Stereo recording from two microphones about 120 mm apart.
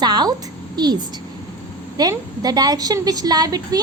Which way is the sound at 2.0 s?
35° right (ahead or behind).